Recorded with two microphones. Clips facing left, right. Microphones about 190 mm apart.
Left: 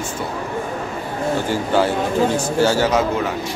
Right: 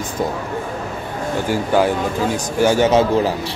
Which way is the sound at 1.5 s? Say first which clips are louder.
Right 4 dB; 15° right (ahead or behind).